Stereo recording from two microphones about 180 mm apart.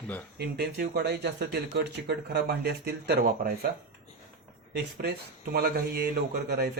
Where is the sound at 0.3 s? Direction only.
65° right (ahead or behind).